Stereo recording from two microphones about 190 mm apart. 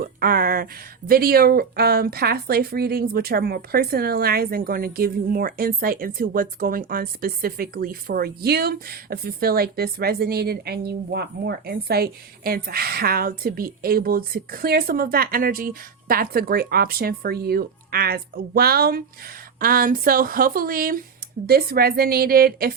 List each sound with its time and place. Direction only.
0.0 s speech: 50° right (ahead or behind)